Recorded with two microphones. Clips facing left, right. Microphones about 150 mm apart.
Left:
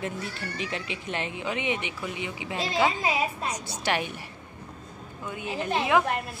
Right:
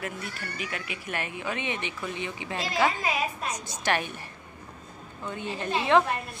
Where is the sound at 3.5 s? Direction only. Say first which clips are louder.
Even; 10° left (ahead or behind).